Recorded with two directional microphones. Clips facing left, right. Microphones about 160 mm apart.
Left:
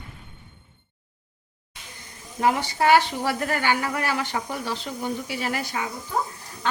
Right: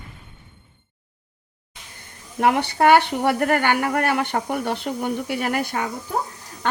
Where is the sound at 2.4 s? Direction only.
65° right (ahead or behind).